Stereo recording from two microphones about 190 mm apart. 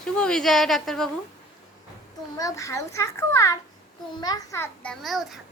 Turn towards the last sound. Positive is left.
turn(degrees=0)  # may be behind; listen again after turning